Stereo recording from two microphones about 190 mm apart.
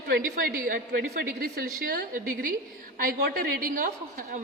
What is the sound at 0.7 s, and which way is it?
A woman's voice, 50° right (ahead or behind).